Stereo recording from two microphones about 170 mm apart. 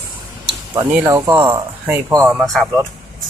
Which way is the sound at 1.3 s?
30° right (ahead or behind).